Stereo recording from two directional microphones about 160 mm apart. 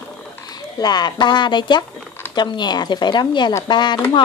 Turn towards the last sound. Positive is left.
turn(degrees=25)  # may be behind; listen again after turning